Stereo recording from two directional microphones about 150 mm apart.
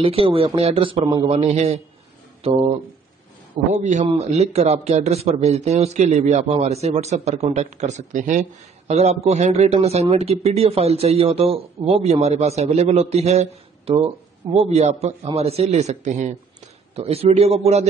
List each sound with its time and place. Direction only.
0.0 s a man's voice: 40° right (ahead or behind)
3.7 s a man's voice: 50° right (ahead or behind)
13.9 s speech: 35° right (ahead or behind)
14.5 s a man's voice: 45° right (ahead or behind)